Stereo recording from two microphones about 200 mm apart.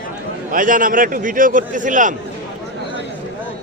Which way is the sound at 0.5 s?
40° right (ahead or behind).